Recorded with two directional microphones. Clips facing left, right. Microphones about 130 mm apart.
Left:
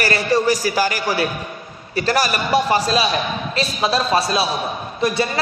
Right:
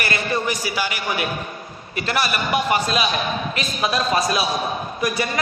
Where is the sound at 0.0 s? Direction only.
35° left (ahead or behind).